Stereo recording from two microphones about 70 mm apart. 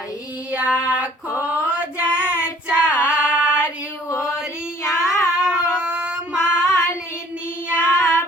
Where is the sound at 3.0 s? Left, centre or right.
Centre.